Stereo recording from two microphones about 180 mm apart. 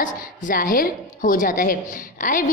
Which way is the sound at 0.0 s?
50° left (ahead or behind).